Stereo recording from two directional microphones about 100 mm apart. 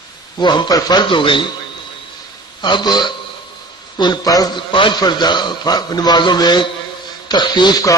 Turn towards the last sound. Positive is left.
turn(degrees=40)  # may be behind; listen again after turning